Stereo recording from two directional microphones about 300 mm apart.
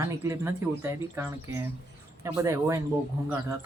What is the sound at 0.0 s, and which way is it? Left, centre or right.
Speech, centre.